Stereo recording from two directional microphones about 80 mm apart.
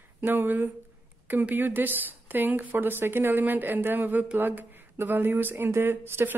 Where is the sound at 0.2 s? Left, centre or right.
Right.